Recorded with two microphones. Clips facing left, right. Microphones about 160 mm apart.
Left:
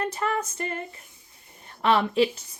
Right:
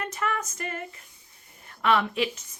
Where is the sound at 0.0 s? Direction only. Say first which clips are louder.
Left 3 dB; 30° left (ahead or behind).